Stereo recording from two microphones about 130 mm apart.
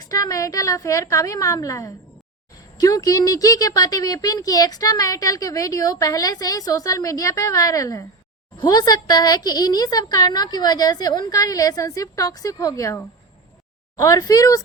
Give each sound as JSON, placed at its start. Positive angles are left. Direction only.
{"t": 0.0, "sound": "speech", "side_deg": 30}